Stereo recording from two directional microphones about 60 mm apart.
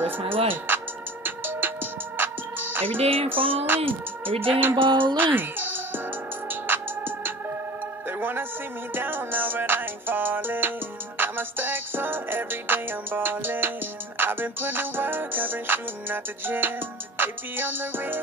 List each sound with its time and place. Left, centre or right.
1.2 s music: right